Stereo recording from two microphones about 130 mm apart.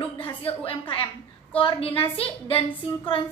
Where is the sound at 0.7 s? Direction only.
45° left (ahead or behind).